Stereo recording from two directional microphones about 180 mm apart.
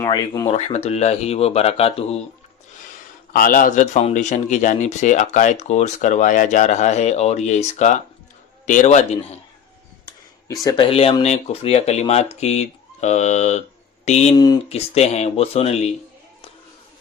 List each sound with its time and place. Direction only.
0.0 s speech: 15° left (ahead or behind)
0.4 s speech: 35° left (ahead or behind)
3.3 s speech: 50° left (ahead or behind)
10.1 s speech: 20° left (ahead or behind); by 14.3 s 40° left (ahead or behind)
14.3 s speech: 20° left (ahead or behind)
14.7 s speech: 35° left (ahead or behind)